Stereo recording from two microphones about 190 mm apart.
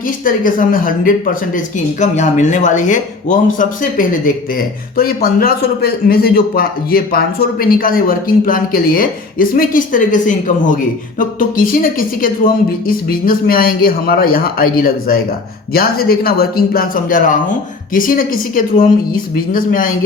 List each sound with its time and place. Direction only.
0.3 s a man's voice: 45° left (ahead or behind)